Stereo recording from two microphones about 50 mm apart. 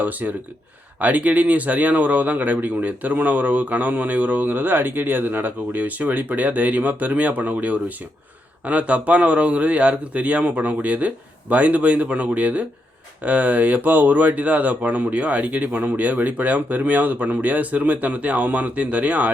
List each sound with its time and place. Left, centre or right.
0.0 s speech: right